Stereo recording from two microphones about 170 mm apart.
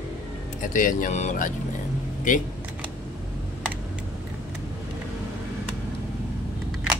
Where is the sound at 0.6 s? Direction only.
50° left (ahead or behind).